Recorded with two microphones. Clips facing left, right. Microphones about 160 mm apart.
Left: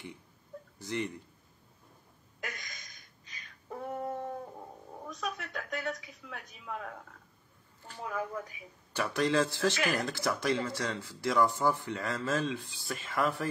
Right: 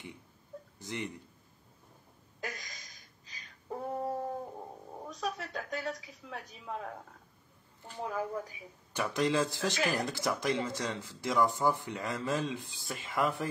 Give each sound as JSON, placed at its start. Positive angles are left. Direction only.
{"t": 0.7, "sound": "speech", "side_deg": -20}
{"t": 2.4, "sound": "a sound", "side_deg": -35}
{"t": 3.7, "sound": "female singing", "side_deg": -30}
{"t": 5.1, "sound": "speech", "side_deg": -30}
{"t": 8.0, "sound": "speech", "side_deg": -30}
{"t": 8.9, "sound": "speech", "side_deg": -20}